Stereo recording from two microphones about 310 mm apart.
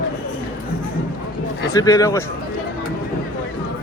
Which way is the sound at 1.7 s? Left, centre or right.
Centre.